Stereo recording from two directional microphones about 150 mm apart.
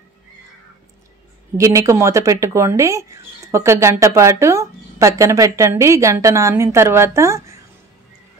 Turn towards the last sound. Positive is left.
turn(degrees=-20)  # may be behind; listen again after turning